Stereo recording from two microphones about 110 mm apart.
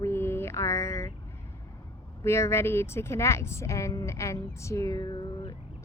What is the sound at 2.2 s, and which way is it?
A woman's voice, 25° left (ahead or behind).